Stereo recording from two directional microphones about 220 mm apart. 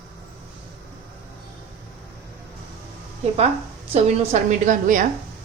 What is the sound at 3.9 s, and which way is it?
A woman's voice, 30° right (ahead or behind).